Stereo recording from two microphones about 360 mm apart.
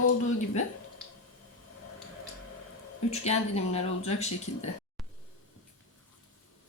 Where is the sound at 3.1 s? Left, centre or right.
Centre.